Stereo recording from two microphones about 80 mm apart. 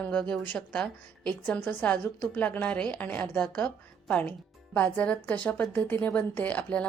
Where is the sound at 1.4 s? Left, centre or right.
Left.